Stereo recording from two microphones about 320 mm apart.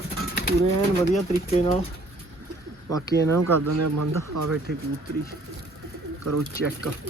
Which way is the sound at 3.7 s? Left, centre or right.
Right.